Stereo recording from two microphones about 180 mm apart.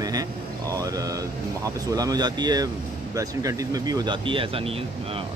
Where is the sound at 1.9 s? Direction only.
20° right (ahead or behind).